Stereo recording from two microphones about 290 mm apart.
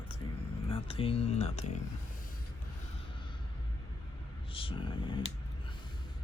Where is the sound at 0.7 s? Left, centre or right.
Centre.